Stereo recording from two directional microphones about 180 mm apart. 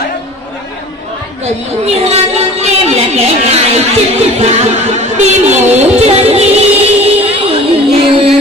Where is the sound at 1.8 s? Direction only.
35° right (ahead or behind).